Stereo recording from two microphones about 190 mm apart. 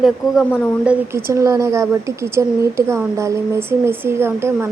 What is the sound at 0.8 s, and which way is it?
A woman's voice, 15° right (ahead or behind).